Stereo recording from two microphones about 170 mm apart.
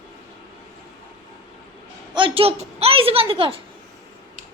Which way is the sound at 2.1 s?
30° right (ahead or behind).